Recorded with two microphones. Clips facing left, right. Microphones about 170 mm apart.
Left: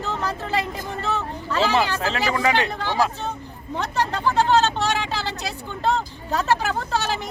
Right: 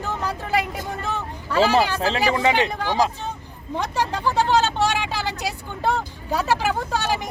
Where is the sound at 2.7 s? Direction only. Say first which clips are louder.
Right 1 dB; 15° right (ahead or behind).